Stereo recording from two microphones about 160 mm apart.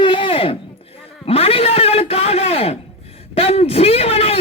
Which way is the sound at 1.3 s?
40° left (ahead or behind).